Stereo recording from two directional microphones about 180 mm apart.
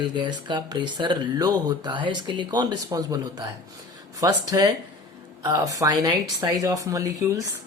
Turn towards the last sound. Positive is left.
turn(degrees=-20)  # may be behind; listen again after turning